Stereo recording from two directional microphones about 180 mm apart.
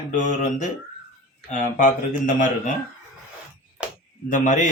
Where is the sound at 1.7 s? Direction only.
45° left (ahead or behind).